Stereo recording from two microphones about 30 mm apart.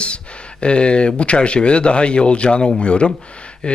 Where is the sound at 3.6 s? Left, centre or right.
Left.